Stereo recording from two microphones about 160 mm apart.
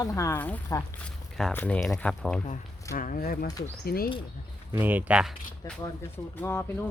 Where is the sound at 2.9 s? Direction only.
60° left (ahead or behind).